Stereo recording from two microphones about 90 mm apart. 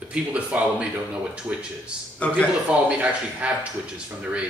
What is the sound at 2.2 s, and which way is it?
Speech, 15° left (ahead or behind).